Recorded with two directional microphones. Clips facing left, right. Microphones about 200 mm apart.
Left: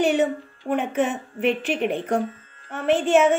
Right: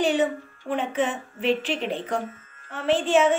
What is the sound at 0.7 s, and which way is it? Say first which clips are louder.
A woman's voice: left 3 dB; 55° left (ahead or behind).